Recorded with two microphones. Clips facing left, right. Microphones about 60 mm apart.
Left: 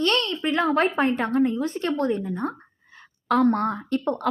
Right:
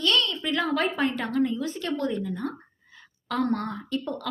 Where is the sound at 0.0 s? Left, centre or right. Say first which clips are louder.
Left 2 dB; left.